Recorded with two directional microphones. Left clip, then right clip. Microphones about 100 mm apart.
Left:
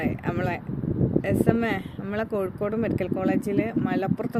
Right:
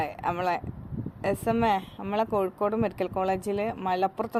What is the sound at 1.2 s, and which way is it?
A woman's voice, 40° left (ahead or behind).